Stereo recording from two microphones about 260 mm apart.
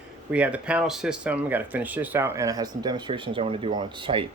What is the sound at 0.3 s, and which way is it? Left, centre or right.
Speech, centre.